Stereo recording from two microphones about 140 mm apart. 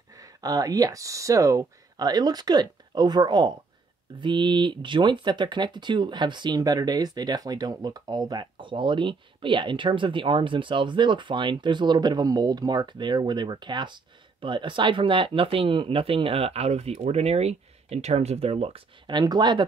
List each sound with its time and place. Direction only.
0.1 s speech: 25° right (ahead or behind)